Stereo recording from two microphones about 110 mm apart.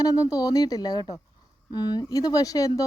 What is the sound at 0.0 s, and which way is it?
A woman's voice, 35° left (ahead or behind).